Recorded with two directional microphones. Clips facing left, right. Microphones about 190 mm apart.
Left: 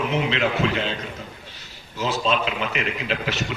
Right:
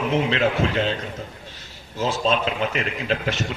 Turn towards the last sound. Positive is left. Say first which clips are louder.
# right 2 dB
turn(degrees=-40)  # may be behind; listen again after turning